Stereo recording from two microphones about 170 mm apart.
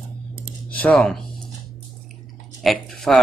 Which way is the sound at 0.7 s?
5° left (ahead or behind).